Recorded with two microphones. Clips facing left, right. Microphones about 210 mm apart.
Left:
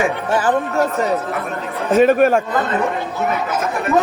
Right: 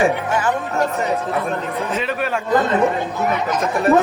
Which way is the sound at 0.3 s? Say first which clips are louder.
Left 3 dB; 35° left (ahead or behind).